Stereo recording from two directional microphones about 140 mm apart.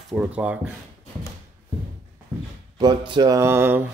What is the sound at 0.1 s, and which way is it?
Speech, 10° right (ahead or behind).